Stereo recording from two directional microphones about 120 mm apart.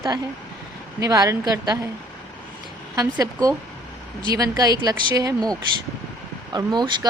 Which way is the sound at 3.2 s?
30° right (ahead or behind).